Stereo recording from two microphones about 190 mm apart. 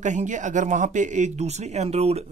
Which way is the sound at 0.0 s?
40° right (ahead or behind).